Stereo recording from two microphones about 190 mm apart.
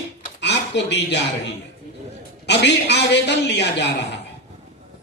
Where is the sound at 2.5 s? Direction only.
65° left (ahead or behind).